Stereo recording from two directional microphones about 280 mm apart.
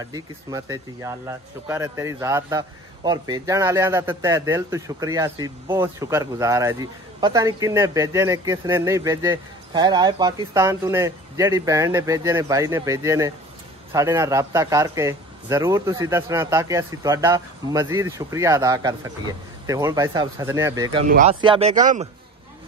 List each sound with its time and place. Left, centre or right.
0.0 s speech: centre
21.1 s speech: right